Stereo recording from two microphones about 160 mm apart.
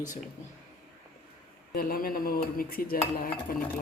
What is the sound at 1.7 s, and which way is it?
Dishes, 65° left (ahead or behind).